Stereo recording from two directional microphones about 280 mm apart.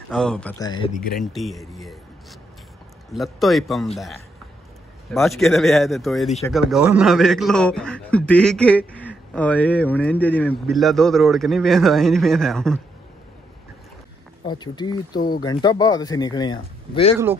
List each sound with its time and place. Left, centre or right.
0.1 s a man's voice: centre
1.2 s a man's voice: centre
3.1 s a man's voice: centre
5.1 s a man's voice: centre
14.4 s a man's voice: centre
15.1 s speech: left
15.4 s a man's voice: centre